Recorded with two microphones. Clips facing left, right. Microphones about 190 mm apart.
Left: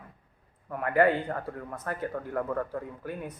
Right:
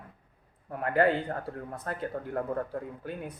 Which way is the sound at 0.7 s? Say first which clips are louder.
Left 1 dB; 35° right (ahead or behind).